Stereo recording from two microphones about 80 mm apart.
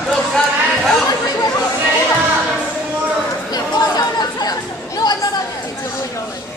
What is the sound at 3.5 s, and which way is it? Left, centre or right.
Chatter, left.